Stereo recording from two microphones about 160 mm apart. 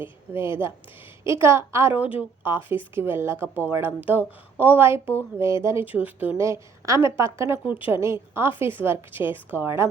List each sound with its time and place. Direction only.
0.0 s a woman's voice: 15° right (ahead or behind)